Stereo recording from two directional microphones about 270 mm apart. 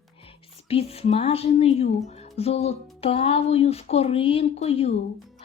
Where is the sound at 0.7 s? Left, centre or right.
Left.